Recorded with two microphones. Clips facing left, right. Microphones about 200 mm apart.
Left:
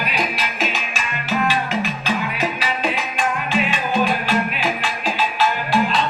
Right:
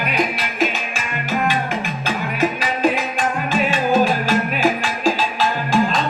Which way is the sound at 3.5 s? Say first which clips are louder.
Right 7 dB; 45° right (ahead or behind).